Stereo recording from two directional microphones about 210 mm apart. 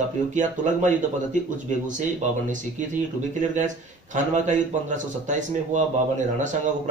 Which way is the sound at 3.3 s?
35° right (ahead or behind).